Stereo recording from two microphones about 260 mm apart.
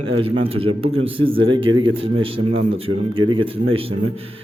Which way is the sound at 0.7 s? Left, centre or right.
Right.